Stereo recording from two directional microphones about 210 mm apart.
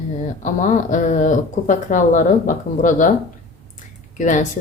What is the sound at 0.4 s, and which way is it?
Speech, 35° left (ahead or behind).